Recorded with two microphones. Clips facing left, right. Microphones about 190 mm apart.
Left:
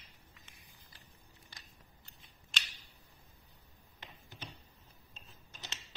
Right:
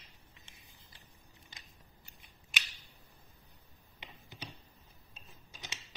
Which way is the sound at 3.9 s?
15° right (ahead or behind).